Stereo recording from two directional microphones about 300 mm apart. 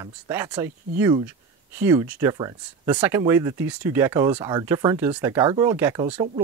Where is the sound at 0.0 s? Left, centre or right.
Centre.